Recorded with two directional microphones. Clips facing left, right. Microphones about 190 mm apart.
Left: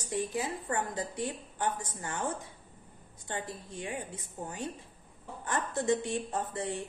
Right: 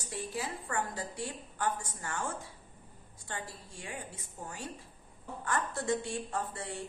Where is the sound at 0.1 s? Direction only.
20° left (ahead or behind).